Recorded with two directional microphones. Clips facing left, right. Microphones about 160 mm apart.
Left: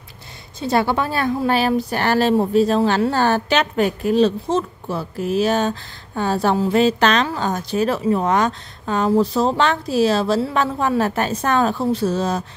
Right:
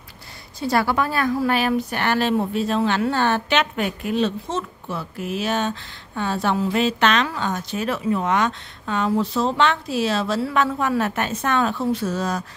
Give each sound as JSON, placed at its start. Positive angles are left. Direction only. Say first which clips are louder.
{"t": 0.6, "sound": "speech", "louder": "left 2 dB", "side_deg": 25}